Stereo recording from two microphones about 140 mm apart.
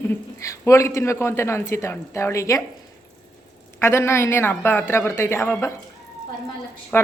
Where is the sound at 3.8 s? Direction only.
20° left (ahead or behind).